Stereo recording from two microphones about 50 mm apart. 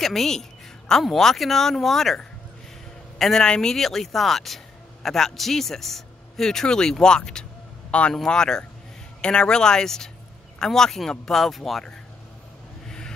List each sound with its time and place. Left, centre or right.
0.0 s speech: centre
3.2 s a man's voice: centre
12.8 s vehicle: centre